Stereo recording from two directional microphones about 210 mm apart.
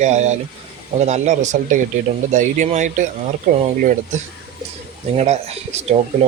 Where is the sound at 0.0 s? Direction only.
35° right (ahead or behind).